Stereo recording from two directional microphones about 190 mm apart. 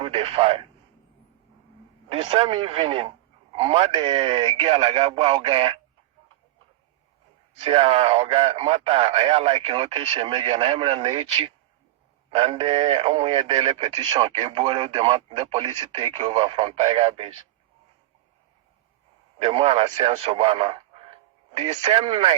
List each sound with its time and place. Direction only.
0.0 s speech: 30° right (ahead or behind)
2.0 s a man's voice: 30° right (ahead or behind)
7.6 s speech: 30° right (ahead or behind)
19.4 s speech: 30° right (ahead or behind)